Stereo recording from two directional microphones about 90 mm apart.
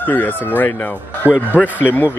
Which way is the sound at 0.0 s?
20° left (ahead or behind).